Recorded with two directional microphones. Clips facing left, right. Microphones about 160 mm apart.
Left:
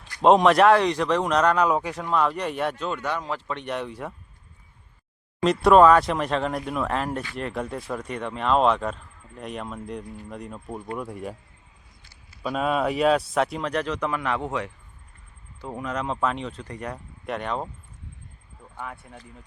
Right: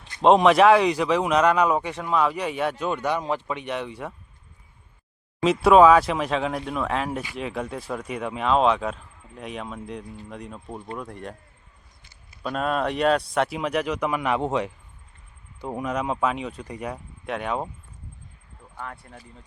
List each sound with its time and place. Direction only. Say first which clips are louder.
0.2 s speech: right 1 dB; centre (ahead or behind)
2.8 s speech: right 3 dB; 15° right (ahead or behind)
3.5 s speech: right 1 dB; centre (ahead or behind)
5.4 s speech: right 1 dB; centre (ahead or behind)
12.4 s speech: left 1 dB; 5° left (ahead or behind)
18.8 s speech: even; 5° left (ahead or behind)